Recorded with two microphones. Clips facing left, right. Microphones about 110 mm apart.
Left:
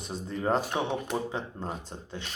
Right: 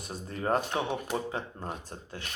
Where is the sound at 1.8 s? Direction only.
25° left (ahead or behind).